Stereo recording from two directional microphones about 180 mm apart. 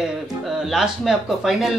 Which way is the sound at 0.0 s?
Centre (ahead or behind).